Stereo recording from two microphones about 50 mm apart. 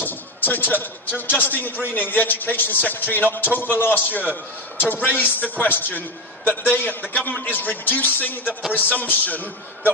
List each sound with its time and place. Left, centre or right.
0.0 s a man's voice: left